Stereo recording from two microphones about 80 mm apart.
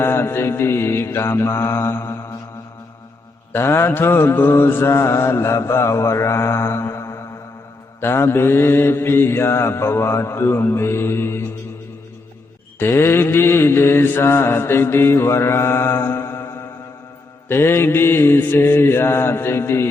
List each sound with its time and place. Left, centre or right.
0.0 s mantra: left
3.5 s mantra: left
12.8 s mantra: left